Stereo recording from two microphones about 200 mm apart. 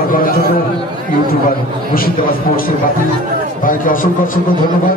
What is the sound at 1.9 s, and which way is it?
A man's voice, 45° left (ahead or behind).